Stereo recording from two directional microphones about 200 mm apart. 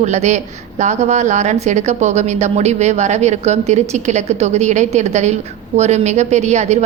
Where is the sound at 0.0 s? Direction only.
35° right (ahead or behind).